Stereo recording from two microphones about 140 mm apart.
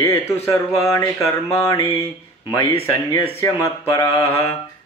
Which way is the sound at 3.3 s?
20° left (ahead or behind).